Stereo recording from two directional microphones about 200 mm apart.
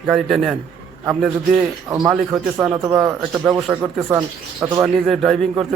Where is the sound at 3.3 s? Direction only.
Centre (ahead or behind).